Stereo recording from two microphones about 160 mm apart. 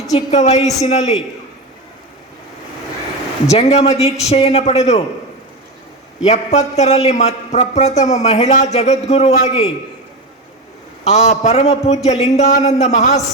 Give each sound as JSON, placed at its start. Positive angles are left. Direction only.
{"t": 0.1, "sound": "a man's voice", "side_deg": 45}
{"t": 3.5, "sound": "a man's voice", "side_deg": 40}
{"t": 6.2, "sound": "a man's voice", "side_deg": 45}
{"t": 11.0, "sound": "a man's voice", "side_deg": 45}